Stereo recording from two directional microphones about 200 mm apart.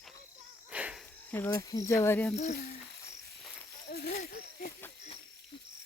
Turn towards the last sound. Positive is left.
turn(degrees=40)  # may be behind; listen again after turning